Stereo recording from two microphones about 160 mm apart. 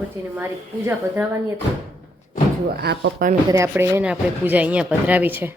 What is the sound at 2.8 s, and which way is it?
Speech, 80° right.